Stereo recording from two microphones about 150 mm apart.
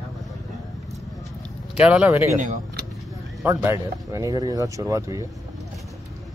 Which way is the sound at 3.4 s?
15° right (ahead or behind).